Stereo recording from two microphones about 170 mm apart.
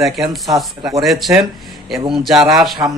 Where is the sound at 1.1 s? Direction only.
Centre (ahead or behind).